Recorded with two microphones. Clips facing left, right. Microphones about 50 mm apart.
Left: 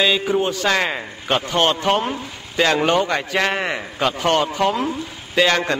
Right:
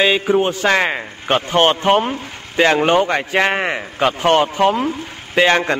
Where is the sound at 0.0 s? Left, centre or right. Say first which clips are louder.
Right 3 dB; right.